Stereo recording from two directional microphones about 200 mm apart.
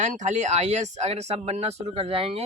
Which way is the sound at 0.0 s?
35° right (ahead or behind).